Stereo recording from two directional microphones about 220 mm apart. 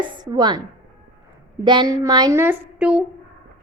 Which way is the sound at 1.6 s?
20° right (ahead or behind).